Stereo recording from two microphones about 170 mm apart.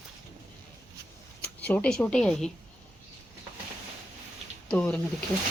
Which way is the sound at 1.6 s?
10° left (ahead or behind).